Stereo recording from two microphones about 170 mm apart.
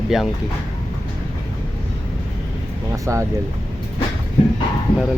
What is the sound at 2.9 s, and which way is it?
Speech, 20° right (ahead or behind).